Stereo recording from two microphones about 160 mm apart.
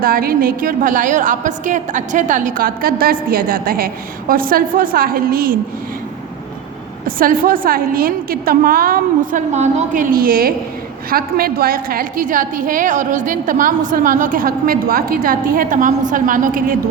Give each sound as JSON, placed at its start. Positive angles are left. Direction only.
{"t": 0.0, "sound": "a woman's voice", "side_deg": -65}
{"t": 7.2, "sound": "a woman's voice", "side_deg": -60}